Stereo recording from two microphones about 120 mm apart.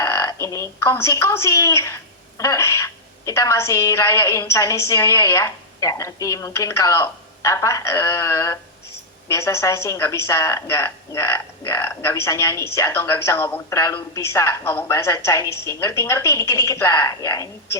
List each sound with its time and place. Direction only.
0.0 s a woman's voice: 25° left (ahead or behind)